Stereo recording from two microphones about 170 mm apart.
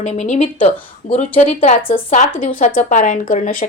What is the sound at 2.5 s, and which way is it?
Speech, 50° left (ahead or behind).